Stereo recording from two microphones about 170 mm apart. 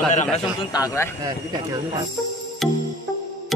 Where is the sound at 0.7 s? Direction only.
20° left (ahead or behind).